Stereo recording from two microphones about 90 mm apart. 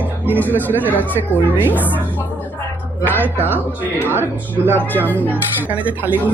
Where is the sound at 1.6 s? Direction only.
20° right (ahead or behind).